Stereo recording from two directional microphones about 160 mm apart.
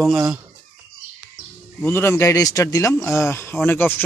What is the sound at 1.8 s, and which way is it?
A man's voice, 15° left (ahead or behind).